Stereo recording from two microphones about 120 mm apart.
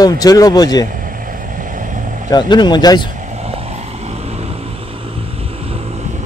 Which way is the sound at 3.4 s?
60° right (ahead or behind).